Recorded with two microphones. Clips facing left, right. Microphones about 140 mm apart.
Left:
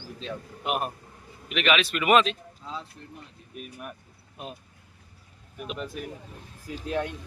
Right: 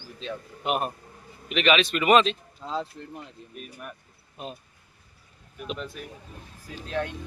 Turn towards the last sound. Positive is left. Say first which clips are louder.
# even
turn(degrees=15)  # may be behind; listen again after turning